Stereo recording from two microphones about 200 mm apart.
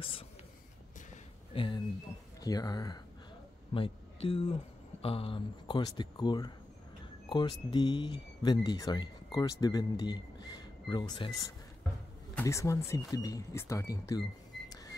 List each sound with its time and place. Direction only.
1.1 s a sound: 25° left (ahead or behind)
2.4 s speech: 20° left (ahead or behind)
3.7 s speech: 30° left (ahead or behind)
14.7 s camera: 15° left (ahead or behind)